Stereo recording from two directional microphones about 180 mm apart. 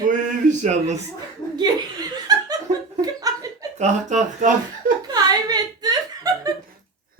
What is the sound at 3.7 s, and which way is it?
Speech, 40° right (ahead or behind).